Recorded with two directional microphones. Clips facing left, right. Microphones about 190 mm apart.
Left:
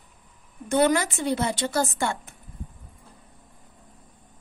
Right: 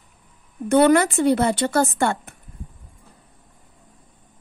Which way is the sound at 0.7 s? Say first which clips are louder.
Right 6 dB; 60° right (ahead or behind).